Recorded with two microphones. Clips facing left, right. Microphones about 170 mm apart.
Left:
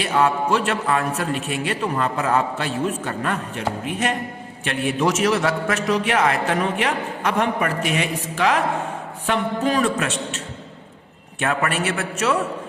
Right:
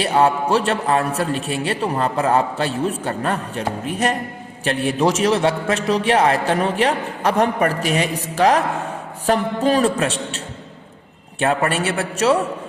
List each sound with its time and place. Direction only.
0.0 s a man's voice: 35° right (ahead or behind)